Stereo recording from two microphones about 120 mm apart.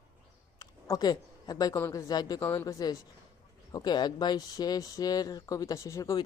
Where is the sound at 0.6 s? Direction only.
30° left (ahead or behind).